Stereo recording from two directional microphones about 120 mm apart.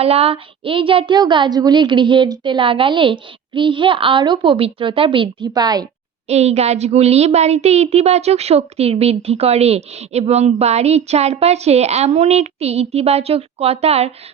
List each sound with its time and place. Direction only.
0.0 s a woman's voice: 55° right (ahead or behind); by 5.8 s 35° right (ahead or behind)
6.2 s a woman's voice: 65° right (ahead or behind)